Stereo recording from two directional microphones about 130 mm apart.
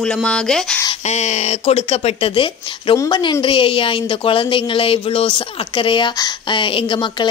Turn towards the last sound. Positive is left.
turn(degrees=40)  # may be behind; listen again after turning